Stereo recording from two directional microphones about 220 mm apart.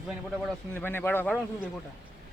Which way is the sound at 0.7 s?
10° left (ahead or behind).